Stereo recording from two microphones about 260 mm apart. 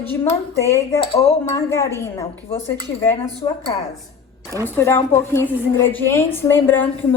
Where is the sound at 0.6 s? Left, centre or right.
Centre.